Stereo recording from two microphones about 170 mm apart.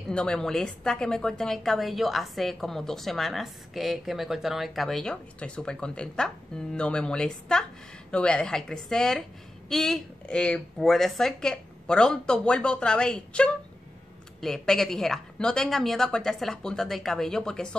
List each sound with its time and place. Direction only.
0.1 s a woman's voice: 5° left (ahead or behind)